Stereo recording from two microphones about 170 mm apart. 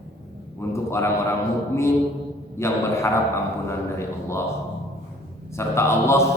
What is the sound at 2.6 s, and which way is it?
Speech, 15° left (ahead or behind).